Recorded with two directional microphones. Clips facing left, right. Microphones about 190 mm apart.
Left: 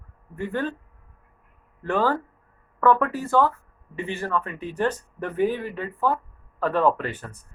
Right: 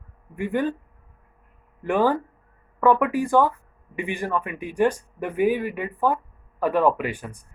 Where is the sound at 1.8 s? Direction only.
15° right (ahead or behind).